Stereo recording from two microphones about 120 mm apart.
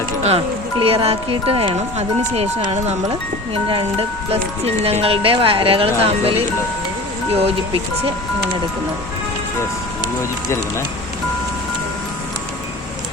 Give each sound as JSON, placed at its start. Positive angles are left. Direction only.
{"t": 0.2, "sound": "speech", "side_deg": -55}
{"t": 3.5, "sound": "speech", "side_deg": -45}
{"t": 4.3, "sound": "speech", "side_deg": -55}